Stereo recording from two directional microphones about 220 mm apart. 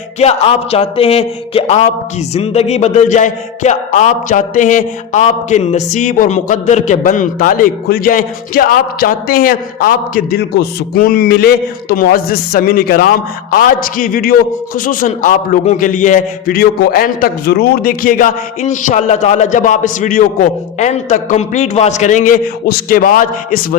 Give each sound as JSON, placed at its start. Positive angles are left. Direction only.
{"t": 0.2, "sound": "a man's voice", "side_deg": 30}
{"t": 2.3, "sound": "music", "side_deg": 30}